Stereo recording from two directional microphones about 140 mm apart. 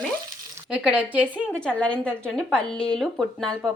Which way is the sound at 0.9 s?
10° right (ahead or behind).